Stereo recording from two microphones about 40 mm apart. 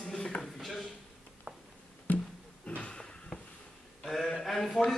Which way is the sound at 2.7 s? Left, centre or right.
Left.